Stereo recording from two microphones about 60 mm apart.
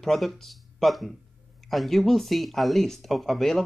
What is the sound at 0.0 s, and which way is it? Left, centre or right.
Speech, centre.